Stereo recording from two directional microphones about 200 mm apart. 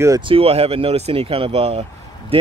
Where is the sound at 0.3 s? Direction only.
30° right (ahead or behind).